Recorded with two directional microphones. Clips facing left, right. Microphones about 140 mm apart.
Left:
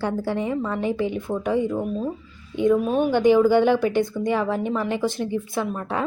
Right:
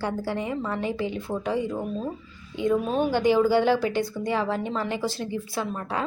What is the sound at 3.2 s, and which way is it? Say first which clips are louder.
A woman's voice: left 4 dB; 20° left (ahead or behind).